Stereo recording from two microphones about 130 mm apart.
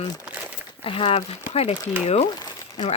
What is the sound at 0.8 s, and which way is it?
Speech, 45° left (ahead or behind).